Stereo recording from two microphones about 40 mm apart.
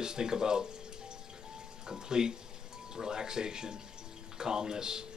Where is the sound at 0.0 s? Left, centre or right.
Centre.